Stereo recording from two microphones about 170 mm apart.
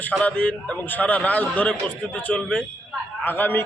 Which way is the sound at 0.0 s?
5° left (ahead or behind).